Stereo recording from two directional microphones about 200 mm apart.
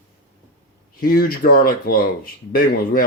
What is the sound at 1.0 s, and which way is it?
Speech, 50° left (ahead or behind).